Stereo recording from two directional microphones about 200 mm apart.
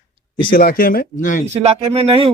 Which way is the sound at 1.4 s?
30° right (ahead or behind).